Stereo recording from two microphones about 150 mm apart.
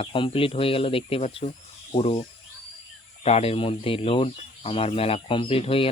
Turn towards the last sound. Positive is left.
turn(degrees=40)  # may be behind; listen again after turning